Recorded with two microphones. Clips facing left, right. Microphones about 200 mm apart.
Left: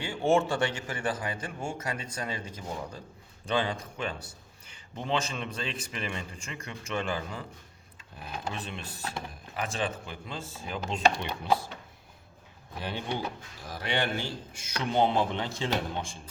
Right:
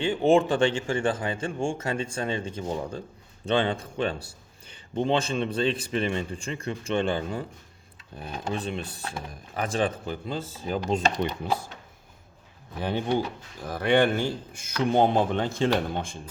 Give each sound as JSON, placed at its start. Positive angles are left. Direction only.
{"t": 0.0, "sound": "a man's voice", "side_deg": -20}
{"t": 12.8, "sound": "a man's voice", "side_deg": -50}